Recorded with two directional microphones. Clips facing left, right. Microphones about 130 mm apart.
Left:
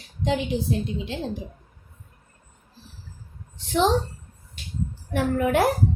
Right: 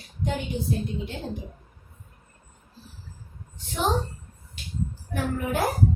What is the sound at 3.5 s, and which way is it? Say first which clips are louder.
Speech: left 8 dB; 90° left.